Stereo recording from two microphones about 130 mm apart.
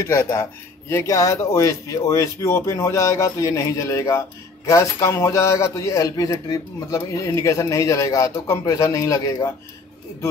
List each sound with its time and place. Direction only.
0.0 s speech: 20° left (ahead or behind)